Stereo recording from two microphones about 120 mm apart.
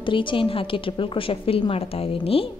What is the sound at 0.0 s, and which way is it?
A woman's voice, 45° left (ahead or behind).